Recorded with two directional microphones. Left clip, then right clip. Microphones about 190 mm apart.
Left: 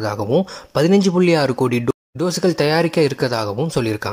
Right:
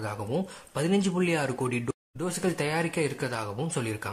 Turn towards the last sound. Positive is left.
turn(degrees=25)  # may be behind; listen again after turning